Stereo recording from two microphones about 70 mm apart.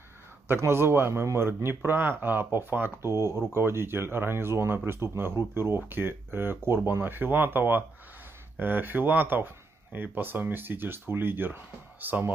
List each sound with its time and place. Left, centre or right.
0.5 s a man's voice: right